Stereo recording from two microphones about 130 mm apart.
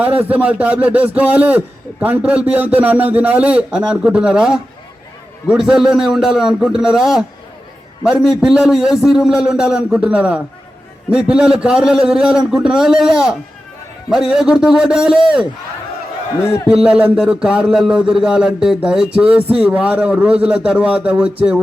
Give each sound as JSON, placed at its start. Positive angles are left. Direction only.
{"t": 0.0, "sound": "a man's voice", "side_deg": -10}
{"t": 16.4, "sound": "a man's voice", "side_deg": 25}
{"t": 16.6, "sound": "speech", "side_deg": -5}